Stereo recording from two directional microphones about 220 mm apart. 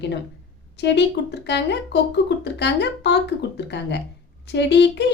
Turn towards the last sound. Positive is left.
turn(degrees=50)  # may be behind; listen again after turning